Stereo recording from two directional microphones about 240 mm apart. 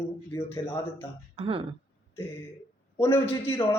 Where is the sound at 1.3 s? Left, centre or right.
Right.